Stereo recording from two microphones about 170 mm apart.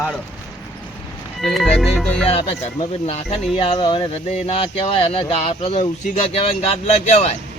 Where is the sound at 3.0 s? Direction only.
40° left (ahead or behind).